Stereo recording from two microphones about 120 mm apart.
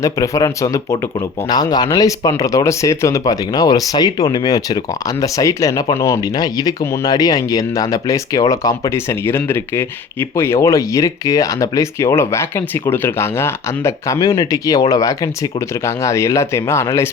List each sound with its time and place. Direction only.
0.0 s speech: 30° left (ahead or behind)